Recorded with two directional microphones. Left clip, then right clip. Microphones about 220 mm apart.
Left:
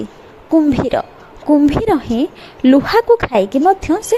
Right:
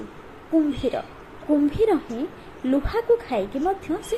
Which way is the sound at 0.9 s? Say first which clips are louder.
Left 11 dB; 40° left (ahead or behind).